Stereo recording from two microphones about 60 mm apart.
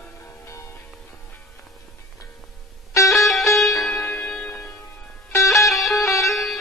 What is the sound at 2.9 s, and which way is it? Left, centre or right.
Music, left.